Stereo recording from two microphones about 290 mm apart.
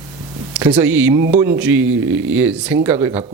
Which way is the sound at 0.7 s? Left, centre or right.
Centre.